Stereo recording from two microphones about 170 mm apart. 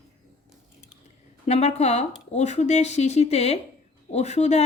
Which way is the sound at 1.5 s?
40° left (ahead or behind).